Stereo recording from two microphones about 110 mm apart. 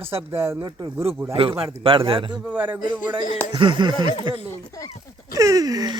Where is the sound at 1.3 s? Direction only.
55° right (ahead or behind).